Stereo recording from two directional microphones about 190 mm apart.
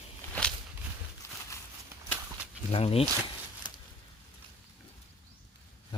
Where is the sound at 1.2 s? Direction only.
15° left (ahead or behind).